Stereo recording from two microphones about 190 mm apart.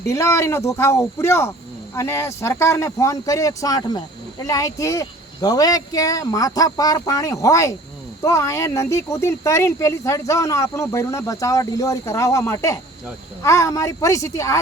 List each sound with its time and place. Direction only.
0.0 s speech: 15° left (ahead or behind)